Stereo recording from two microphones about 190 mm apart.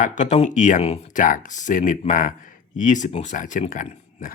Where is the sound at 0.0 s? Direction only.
40° left (ahead or behind).